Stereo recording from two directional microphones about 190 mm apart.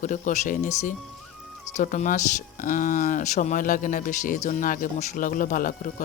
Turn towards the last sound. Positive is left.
turn(degrees=45)  # may be behind; listen again after turning